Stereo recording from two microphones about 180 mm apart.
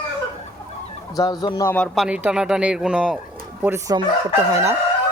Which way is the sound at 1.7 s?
Centre (ahead or behind).